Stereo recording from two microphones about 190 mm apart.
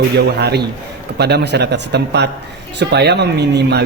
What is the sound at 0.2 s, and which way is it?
Speech, 60° right (ahead or behind).